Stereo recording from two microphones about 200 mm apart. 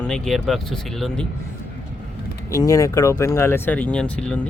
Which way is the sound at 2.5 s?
15° left (ahead or behind).